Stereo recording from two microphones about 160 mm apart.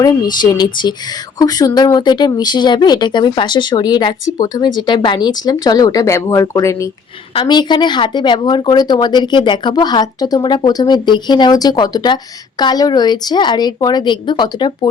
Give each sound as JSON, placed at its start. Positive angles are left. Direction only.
{"t": 0.5, "sound": "speech", "side_deg": 25}